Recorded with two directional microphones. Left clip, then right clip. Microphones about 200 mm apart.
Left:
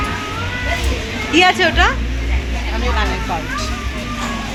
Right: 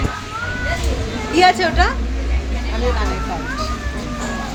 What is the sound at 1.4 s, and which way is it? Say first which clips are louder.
Speech: left 1 dB; 15° left (ahead or behind).